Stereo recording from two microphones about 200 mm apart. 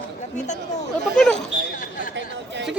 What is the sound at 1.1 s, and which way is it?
Speech, 5° left (ahead or behind).